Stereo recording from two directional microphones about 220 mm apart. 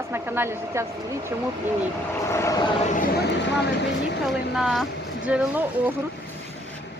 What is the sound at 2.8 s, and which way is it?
Speech, 35° left (ahead or behind).